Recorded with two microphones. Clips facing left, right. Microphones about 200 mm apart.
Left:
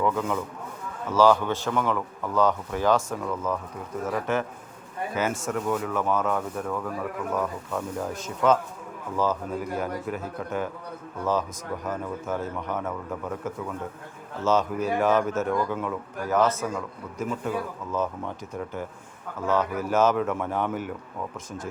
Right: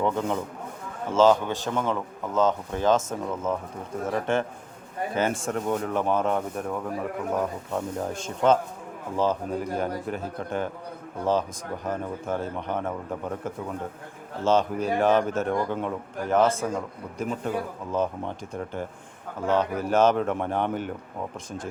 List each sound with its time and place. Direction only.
0.0 s a man's voice: 30° right (ahead or behind)
17.9 s a man's voice: 30° right (ahead or behind)
19.5 s a man's voice: 30° right (ahead or behind)